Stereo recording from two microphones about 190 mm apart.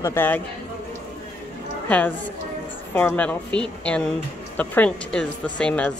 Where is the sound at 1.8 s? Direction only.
5° left (ahead or behind).